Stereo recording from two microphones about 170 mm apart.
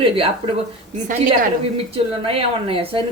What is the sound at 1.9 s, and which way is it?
Speech, 35° right (ahead or behind).